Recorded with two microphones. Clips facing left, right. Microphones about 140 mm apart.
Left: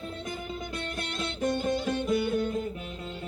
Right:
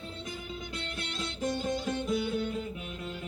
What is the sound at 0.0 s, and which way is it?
Music, 50° left (ahead or behind).